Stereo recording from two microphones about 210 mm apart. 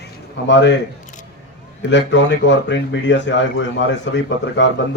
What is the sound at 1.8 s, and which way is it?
Speech, 60° left (ahead or behind).